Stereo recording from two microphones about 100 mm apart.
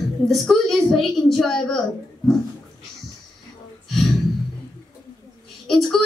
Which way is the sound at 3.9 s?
Centre (ahead or behind).